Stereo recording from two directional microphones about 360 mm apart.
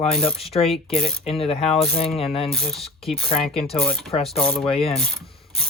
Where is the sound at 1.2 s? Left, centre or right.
Centre.